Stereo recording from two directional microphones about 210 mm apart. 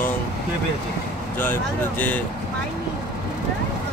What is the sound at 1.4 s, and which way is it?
Speech, 10° left (ahead or behind).